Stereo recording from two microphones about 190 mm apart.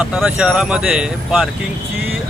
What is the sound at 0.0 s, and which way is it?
Speech, 5° right (ahead or behind).